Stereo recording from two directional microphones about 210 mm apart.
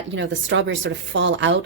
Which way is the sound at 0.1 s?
60° right (ahead or behind).